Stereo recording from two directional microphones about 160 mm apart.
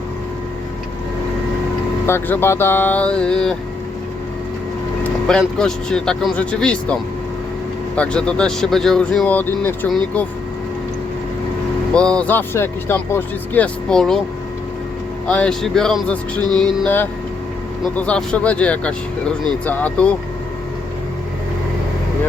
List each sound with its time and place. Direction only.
2.0 s speech: 15° left (ahead or behind)
5.0 s speech: 5° left (ahead or behind)
7.9 s speech: 5° left (ahead or behind)
11.9 s speech: 5° left (ahead or behind)
15.3 s speech: 5° left (ahead or behind)
16.4 s music: 25° right (ahead or behind)
16.8 s speech: 10° left (ahead or behind)